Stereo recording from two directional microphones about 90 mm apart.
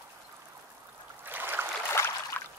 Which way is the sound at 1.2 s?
20° right (ahead or behind).